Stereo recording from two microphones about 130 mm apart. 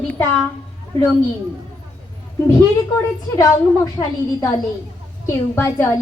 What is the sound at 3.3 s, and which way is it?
A woman's voice, 30° left (ahead or behind).